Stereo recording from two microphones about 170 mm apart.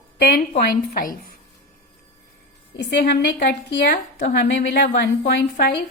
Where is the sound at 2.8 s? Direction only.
85° left; by 4.3 s 55° left (ahead or behind).